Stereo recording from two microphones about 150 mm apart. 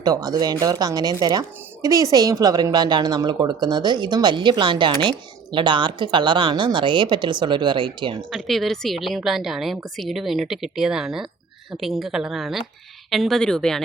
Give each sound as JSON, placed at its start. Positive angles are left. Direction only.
{"t": 0.0, "sound": "a woman's voice", "side_deg": -25}
{"t": 8.3, "sound": "a woman's voice", "side_deg": 0}